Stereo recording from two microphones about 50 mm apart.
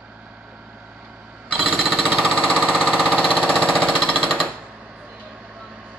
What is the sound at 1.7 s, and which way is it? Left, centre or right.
Jackhammer, centre.